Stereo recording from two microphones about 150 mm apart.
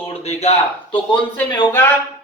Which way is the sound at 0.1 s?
45° left (ahead or behind).